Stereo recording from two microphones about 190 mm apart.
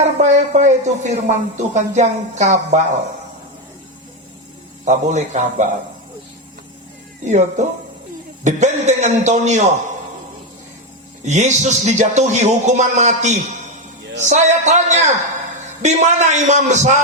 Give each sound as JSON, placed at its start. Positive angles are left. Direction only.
{"t": 0.0, "sound": "speech", "side_deg": -40}
{"t": 4.9, "sound": "speech", "side_deg": -40}
{"t": 7.3, "sound": "speech", "side_deg": -40}
{"t": 11.2, "sound": "speech", "side_deg": -40}